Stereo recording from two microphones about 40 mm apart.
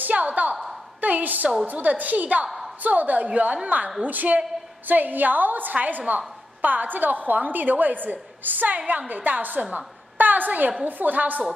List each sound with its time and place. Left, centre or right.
0.0 s a woman's voice: right
8.7 s a woman's voice: right
9.6 s a woman's voice: right
10.1 s a woman's voice: right